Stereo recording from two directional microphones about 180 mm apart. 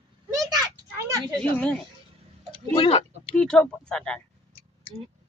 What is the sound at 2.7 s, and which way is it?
Speech, 30° left (ahead or behind).